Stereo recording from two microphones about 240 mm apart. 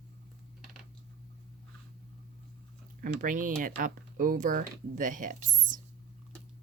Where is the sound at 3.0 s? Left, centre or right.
Right.